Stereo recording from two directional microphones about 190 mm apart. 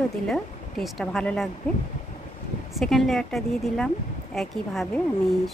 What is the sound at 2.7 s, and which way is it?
Speech, centre (ahead or behind).